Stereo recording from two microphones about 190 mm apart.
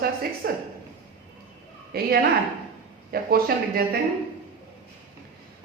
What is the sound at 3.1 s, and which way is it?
Speech, 50° right (ahead or behind).